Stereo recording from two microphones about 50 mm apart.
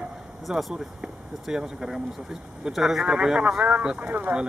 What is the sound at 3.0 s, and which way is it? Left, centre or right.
Speech, centre.